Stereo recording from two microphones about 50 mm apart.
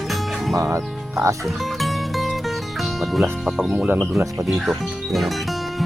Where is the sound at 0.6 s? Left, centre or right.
Right.